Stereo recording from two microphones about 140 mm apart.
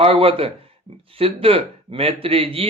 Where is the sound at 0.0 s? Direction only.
40° right (ahead or behind).